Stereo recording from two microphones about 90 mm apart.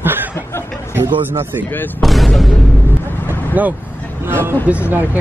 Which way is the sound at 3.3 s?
20° right (ahead or behind).